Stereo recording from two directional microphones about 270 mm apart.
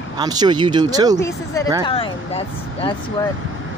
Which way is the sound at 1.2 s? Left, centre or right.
Centre.